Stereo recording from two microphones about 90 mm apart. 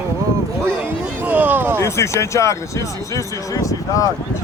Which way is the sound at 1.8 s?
30° left (ahead or behind).